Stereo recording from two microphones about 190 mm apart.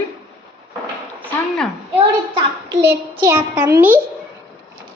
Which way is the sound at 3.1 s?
15° right (ahead or behind).